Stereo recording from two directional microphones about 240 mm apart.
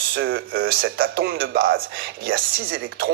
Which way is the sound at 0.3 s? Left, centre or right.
Right.